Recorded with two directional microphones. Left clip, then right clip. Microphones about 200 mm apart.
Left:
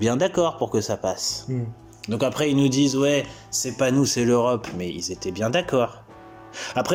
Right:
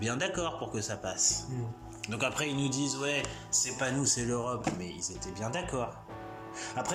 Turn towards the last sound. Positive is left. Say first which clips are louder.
# left 10 dB
turn(degrees=40)  # may be behind; listen again after turning